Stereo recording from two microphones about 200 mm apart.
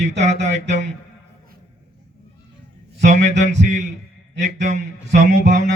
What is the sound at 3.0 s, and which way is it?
Speech, 35° right (ahead or behind).